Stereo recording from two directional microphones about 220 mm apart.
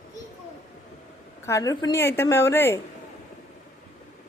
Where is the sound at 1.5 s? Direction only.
15° left (ahead or behind).